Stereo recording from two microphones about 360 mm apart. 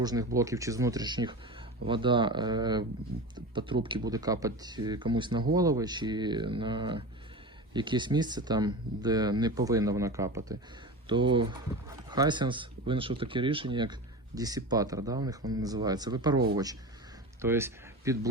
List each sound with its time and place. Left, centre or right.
0.0 s speech: centre
17.4 s speech: centre